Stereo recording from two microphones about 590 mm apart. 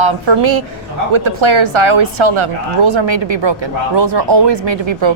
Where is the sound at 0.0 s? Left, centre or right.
Right.